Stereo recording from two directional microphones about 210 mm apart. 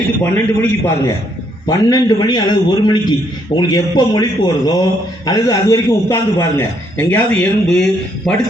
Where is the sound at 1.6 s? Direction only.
15° left (ahead or behind).